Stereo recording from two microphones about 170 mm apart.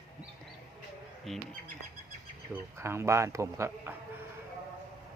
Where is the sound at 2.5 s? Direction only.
15° right (ahead or behind).